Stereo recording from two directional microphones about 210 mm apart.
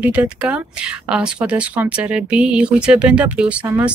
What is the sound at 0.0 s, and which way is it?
Speech, 5° right (ahead or behind).